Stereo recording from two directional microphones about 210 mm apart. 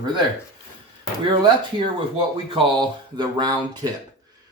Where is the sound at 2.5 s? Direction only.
20° right (ahead or behind).